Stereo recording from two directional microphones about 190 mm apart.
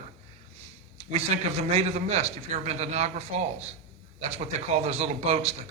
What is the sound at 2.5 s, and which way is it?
Speech, 35° right (ahead or behind).